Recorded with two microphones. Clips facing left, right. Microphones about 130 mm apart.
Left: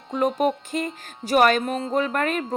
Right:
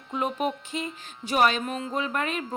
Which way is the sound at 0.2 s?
40° left (ahead or behind).